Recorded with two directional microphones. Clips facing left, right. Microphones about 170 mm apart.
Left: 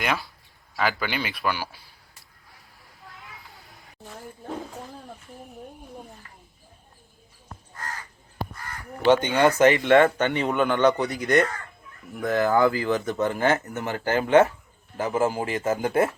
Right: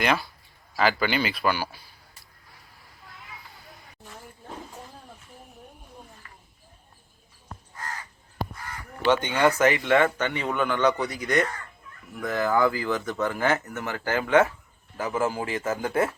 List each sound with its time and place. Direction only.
0.0 s speech: centre (ahead or behind)
3.5 s a sound: centre (ahead or behind)
9.1 s speech: 15° left (ahead or behind)
9.6 s speech: 25° left (ahead or behind)